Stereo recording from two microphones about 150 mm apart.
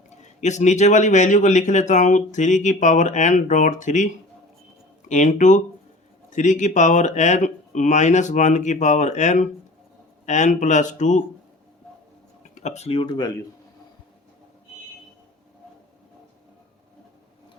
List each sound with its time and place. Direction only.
0.2 s speech: 50° left (ahead or behind)
12.5 s speech: 50° left (ahead or behind); by 13.3 s 30° left (ahead or behind)